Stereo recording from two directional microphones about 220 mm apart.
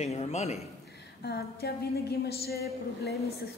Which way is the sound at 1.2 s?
45° left (ahead or behind).